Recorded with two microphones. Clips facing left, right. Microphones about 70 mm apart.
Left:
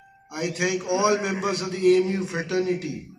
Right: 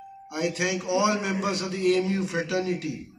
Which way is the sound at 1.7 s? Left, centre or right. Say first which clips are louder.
Left 5 dB; left.